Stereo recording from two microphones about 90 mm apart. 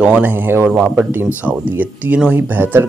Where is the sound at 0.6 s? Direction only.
10° right (ahead or behind).